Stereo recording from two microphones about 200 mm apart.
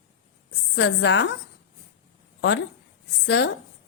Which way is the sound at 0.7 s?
60° left (ahead or behind).